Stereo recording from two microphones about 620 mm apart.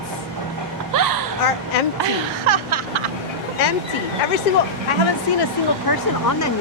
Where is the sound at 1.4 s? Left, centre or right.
Left.